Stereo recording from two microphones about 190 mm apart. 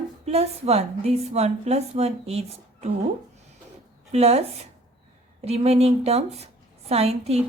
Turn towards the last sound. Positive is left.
turn(degrees=-35)  # may be behind; listen again after turning